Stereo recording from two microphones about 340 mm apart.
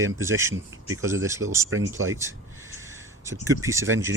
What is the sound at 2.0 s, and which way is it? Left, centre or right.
Speech, right.